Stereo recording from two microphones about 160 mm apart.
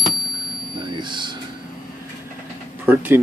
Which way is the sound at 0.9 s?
30° right (ahead or behind).